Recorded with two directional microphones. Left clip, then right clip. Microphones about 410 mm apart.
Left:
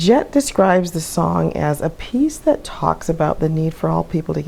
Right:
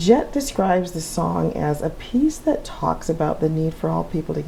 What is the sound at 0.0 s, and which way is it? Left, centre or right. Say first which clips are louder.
Speech: left 3 dB; left.